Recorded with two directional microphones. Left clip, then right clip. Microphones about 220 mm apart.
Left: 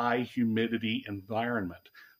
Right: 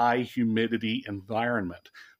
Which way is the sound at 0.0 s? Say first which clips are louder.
Right 5 dB; 35° right (ahead or behind).